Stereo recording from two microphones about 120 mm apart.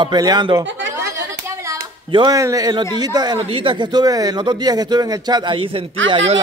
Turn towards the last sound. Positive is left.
turn(degrees=-50)  # may be behind; listen again after turning